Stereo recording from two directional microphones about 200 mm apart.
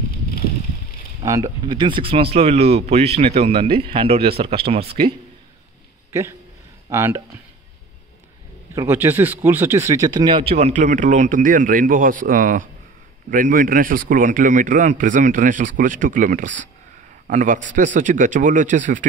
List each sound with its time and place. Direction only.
1.2 s speech: 15° right (ahead or behind)
6.1 s a man's voice: 15° right (ahead or behind)
8.7 s speech: 10° right (ahead or behind); by 19.0 s 40° right (ahead or behind)